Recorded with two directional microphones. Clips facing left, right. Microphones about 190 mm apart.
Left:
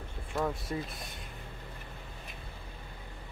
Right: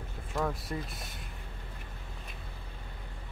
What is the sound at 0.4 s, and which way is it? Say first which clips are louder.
Speech: left 1 dB; centre (ahead or behind).